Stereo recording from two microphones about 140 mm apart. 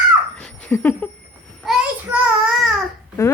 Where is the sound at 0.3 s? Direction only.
10° left (ahead or behind).